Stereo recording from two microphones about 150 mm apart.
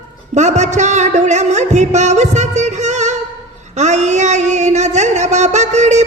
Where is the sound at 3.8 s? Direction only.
50° right (ahead or behind).